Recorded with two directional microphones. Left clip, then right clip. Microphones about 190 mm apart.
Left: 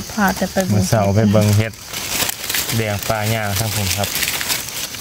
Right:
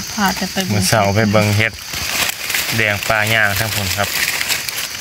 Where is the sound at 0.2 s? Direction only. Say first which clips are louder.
Left 1 dB; 40° left (ahead or behind).